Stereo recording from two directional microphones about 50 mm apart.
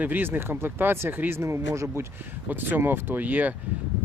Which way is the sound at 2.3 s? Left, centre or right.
Right.